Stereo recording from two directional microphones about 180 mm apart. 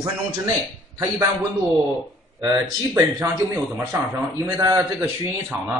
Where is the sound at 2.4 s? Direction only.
20° right (ahead or behind).